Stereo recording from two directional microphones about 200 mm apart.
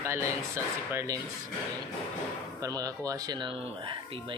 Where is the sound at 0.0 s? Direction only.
15° right (ahead or behind).